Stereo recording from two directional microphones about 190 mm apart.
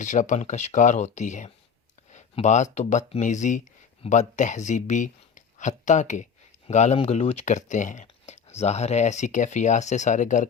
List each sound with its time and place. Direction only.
0.0 s speech: 40° left (ahead or behind)